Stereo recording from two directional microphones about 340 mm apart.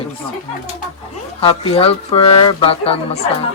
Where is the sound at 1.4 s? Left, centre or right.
Centre.